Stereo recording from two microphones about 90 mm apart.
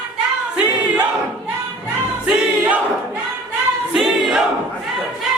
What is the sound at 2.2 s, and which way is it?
Crowd, 15° right (ahead or behind).